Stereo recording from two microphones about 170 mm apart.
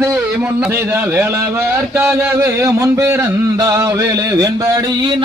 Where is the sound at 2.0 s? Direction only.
15° right (ahead or behind).